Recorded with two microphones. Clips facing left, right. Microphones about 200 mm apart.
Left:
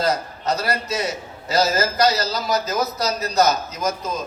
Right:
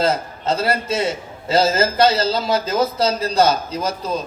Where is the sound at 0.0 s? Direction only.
25° right (ahead or behind).